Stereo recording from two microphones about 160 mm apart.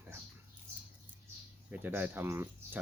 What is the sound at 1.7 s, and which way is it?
Speech, 10° right (ahead or behind).